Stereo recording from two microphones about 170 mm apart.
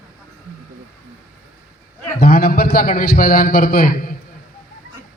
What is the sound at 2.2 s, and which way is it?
A man's voice, 60° left (ahead or behind).